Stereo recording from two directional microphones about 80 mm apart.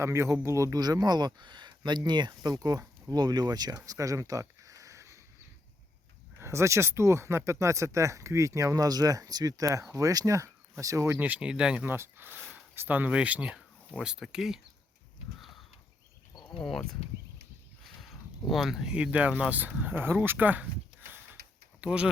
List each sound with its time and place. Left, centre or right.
0.0 s speech: right
0.8 s speech: right
3.8 s a sound: right
6.4 s speech: right
11.2 s speech: centre
11.9 s speech: right; by 14.6 s centre
16.6 s speech: centre
17.8 s a sound: centre
19.4 s speech: centre
21.8 s speech: centre